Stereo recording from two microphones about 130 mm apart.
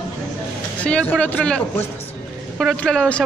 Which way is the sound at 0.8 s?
10° left (ahead or behind).